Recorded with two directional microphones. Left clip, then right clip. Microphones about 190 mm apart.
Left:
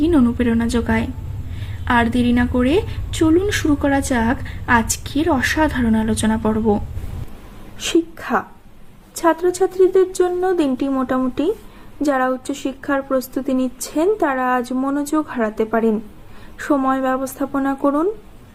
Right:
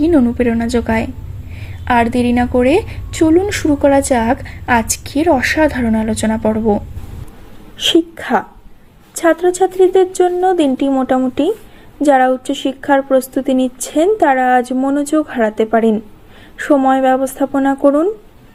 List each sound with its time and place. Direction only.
0.3 s a woman's voice: 15° right (ahead or behind)